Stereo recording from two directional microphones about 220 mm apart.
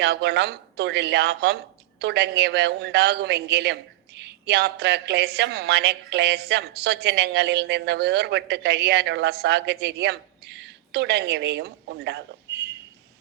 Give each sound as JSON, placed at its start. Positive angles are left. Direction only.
{"t": 0.0, "sound": "a man's voice", "side_deg": -50}